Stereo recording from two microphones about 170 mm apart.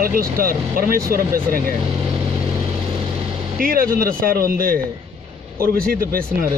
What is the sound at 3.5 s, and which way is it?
Speech, 60° right (ahead or behind).